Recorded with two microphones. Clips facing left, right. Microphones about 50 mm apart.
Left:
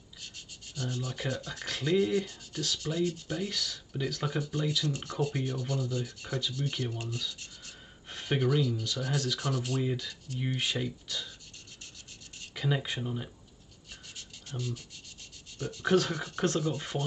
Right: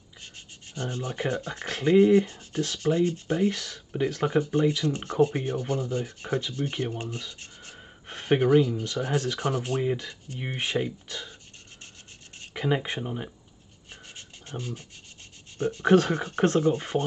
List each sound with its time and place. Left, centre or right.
0.7 s rub: right
12.4 s speech: right
14.1 s a sound: right
15.5 s rub: right